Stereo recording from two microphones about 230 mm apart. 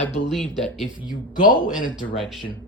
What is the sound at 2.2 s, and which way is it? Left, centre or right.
Speech, centre.